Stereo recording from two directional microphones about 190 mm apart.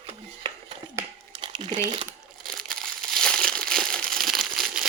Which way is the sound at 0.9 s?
25° right (ahead or behind).